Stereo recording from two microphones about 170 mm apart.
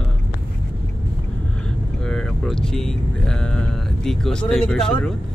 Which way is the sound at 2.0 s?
5° left (ahead or behind).